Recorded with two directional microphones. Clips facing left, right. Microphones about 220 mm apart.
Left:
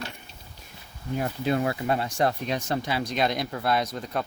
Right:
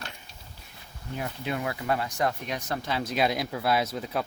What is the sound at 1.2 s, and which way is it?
Speech, 35° left (ahead or behind).